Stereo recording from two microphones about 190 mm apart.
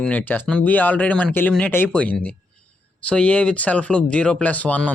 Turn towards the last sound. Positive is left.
turn(degrees=10)  # may be behind; listen again after turning